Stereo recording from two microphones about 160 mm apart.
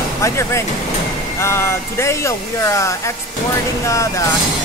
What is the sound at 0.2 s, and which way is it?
Speech, 15° left (ahead or behind).